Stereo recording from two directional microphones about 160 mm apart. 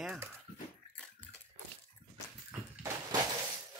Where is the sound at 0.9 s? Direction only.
5° left (ahead or behind).